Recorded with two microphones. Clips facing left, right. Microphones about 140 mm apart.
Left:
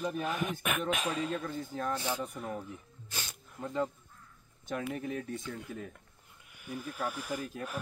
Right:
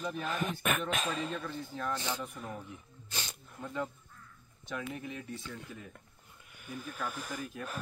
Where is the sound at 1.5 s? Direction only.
40° left (ahead or behind).